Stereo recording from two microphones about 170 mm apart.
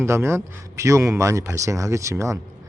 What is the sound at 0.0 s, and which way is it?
Speech, 15° right (ahead or behind).